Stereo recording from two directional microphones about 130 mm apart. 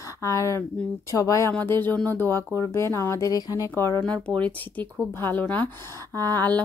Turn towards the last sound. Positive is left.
turn(degrees=15)  # may be behind; listen again after turning